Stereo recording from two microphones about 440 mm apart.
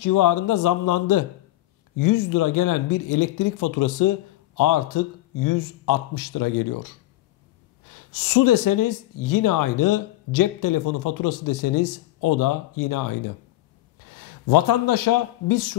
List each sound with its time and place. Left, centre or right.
0.0 s a man's voice: left